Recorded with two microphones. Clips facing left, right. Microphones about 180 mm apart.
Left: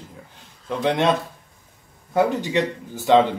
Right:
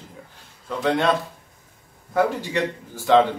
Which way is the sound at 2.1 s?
20° left (ahead or behind).